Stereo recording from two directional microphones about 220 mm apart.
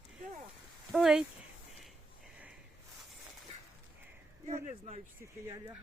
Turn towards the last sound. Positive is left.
turn(degrees=-15)  # may be behind; listen again after turning